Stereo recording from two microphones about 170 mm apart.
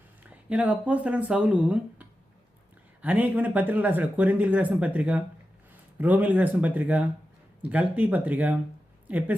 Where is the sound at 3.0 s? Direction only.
10° right (ahead or behind).